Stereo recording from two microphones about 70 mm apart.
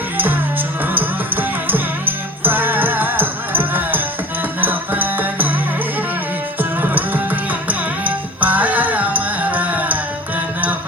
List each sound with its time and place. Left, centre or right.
0.9 s music: right
6.6 s music: right